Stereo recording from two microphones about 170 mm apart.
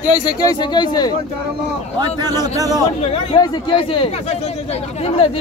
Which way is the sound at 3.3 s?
30° left (ahead or behind).